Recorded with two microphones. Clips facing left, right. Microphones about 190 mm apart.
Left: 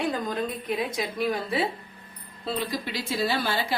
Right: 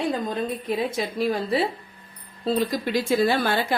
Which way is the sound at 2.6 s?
50° right (ahead or behind).